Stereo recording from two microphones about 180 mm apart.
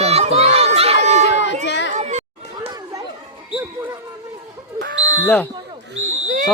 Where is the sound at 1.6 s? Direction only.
75° left (ahead or behind).